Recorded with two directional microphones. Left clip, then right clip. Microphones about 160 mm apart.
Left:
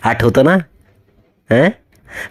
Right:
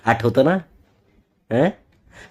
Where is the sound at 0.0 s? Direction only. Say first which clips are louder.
Left 5 dB; 40° left (ahead or behind).